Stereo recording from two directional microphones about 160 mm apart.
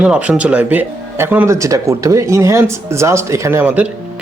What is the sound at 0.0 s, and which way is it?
Speech, 5° right (ahead or behind).